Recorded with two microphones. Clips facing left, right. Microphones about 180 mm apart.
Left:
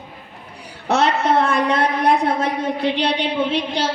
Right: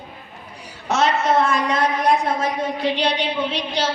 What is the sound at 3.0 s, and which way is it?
Speech, 60° left (ahead or behind).